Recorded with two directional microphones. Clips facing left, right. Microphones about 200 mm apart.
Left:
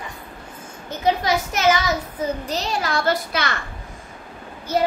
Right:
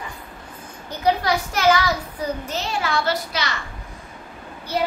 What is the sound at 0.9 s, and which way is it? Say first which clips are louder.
A child's voice: even; 20° left (ahead or behind).